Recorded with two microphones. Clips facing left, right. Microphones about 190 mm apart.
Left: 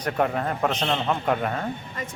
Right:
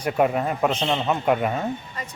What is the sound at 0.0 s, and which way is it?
A man's voice, 10° right (ahead or behind).